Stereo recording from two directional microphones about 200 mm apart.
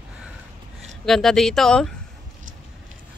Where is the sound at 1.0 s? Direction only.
Centre (ahead or behind).